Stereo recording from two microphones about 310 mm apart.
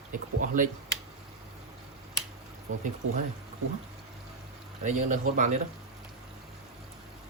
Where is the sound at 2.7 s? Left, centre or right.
Right.